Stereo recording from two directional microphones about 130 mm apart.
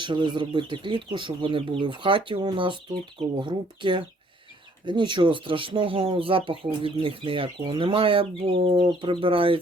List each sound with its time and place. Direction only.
0.0 s speech: 35° right (ahead or behind)